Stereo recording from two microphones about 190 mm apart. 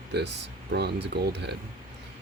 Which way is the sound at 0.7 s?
60° right (ahead or behind).